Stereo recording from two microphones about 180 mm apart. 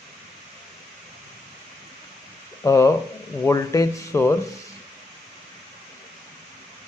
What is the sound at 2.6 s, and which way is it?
Speech, 15° left (ahead or behind).